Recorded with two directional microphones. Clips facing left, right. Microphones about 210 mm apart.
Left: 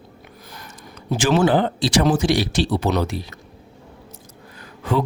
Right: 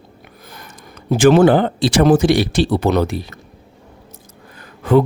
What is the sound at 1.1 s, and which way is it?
Speech, 55° right (ahead or behind).